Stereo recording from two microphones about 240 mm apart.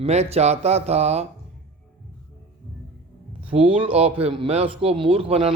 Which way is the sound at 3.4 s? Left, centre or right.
Right.